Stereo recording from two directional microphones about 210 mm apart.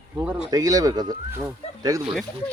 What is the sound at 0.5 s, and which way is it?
Speech, 15° right (ahead or behind).